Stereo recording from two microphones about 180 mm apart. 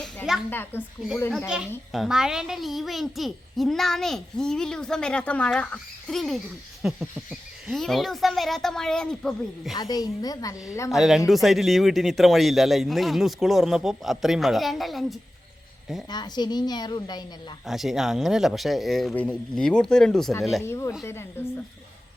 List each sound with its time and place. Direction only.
0.0 s a sound: centre (ahead or behind)
0.5 s speech: 10° left (ahead or behind)
1.9 s a child's voice: centre (ahead or behind)
9.7 s a woman's voice: 20° left (ahead or behind)
10.9 s a child's voice: centre (ahead or behind)
16.0 s a woman's voice: 25° left (ahead or behind)
17.7 s a child's voice: centre (ahead or behind)
20.6 s speech: 15° left (ahead or behind)